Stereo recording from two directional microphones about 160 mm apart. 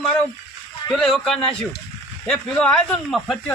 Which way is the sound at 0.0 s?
5° left (ahead or behind).